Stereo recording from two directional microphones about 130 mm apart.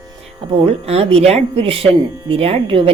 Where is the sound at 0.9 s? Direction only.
50° right (ahead or behind).